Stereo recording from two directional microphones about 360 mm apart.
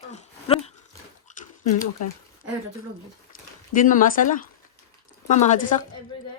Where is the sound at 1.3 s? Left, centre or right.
Centre.